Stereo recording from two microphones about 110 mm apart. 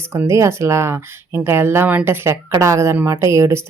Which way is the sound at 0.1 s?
25° right (ahead or behind).